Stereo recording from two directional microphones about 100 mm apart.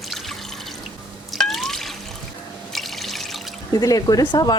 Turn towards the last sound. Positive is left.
turn(degrees=45)  # may be behind; listen again after turning